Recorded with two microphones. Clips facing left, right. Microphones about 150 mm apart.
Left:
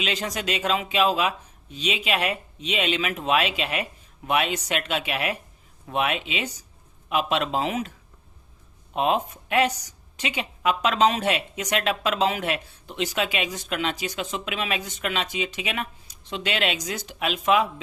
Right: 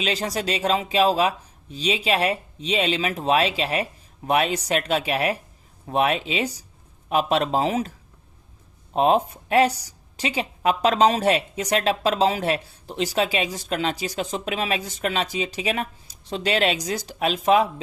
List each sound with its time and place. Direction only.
0.0 s a woman's voice: 35° right (ahead or behind)